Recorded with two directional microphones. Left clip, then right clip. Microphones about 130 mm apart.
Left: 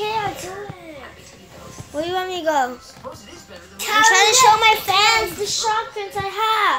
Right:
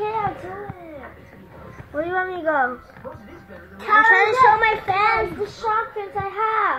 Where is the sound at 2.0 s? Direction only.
5° right (ahead or behind).